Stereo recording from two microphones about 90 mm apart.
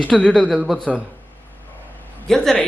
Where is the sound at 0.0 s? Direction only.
10° left (ahead or behind).